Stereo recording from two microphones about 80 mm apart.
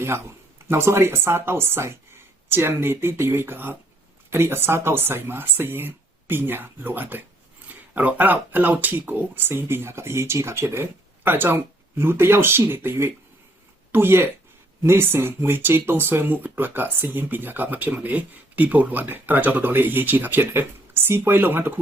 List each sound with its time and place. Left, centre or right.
0.7 s speech: right